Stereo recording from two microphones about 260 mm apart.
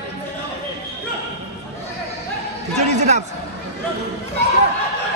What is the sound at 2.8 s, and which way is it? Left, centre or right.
Speech, right.